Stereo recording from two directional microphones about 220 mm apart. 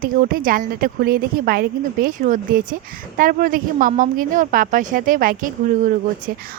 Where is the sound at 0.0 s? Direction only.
40° right (ahead or behind).